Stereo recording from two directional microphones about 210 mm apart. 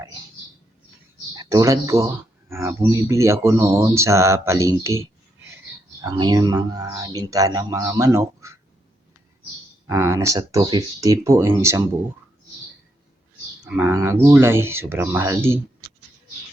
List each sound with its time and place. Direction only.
1.4 s speech: 15° right (ahead or behind)
6.0 s speech: 20° right (ahead or behind)
9.8 s speech: 15° right (ahead or behind)
13.7 s speech: 15° right (ahead or behind)